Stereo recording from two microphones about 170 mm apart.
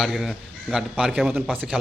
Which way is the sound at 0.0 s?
Centre (ahead or behind).